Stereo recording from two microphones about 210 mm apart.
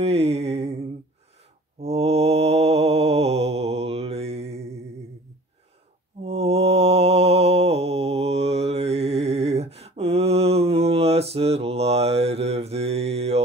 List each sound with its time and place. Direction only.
0.0 s music: 30° right (ahead or behind)
1.8 s mantra: 30° right (ahead or behind)
6.2 s mantra: 30° right (ahead or behind)